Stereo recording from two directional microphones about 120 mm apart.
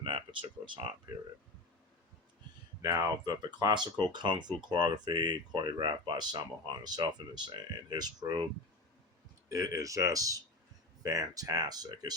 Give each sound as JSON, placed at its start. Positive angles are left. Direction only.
{"t": 0.0, "sound": "a sound", "side_deg": -45}
{"t": 2.8, "sound": "speech", "side_deg": -30}
{"t": 9.5, "sound": "speech", "side_deg": -30}